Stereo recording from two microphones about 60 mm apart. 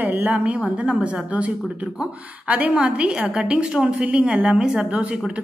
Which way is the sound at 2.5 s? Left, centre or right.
Right.